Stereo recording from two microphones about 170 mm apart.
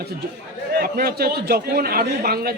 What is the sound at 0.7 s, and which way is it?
A man's voice, 60° right (ahead or behind).